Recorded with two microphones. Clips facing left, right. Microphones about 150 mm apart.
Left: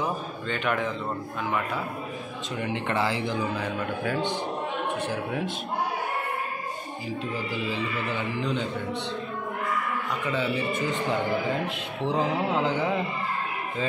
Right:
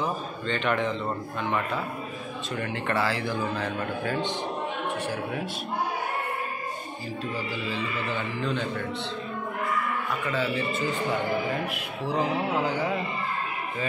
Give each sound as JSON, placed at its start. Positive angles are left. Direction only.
{"t": 0.0, "sound": "speech", "side_deg": 5}
{"t": 2.5, "sound": "a man's voice", "side_deg": 20}
{"t": 8.1, "sound": "a man's voice", "side_deg": 15}
{"t": 10.2, "sound": "speech", "side_deg": 15}